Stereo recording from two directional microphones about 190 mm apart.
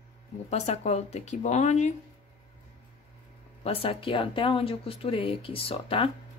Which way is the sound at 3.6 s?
30° left (ahead or behind).